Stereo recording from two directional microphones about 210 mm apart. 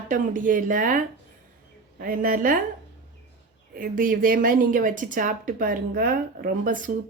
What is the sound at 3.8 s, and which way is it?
A woman's voice, 40° right (ahead or behind).